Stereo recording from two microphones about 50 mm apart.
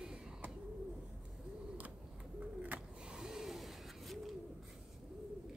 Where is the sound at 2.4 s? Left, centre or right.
Right; by 4.3 s centre.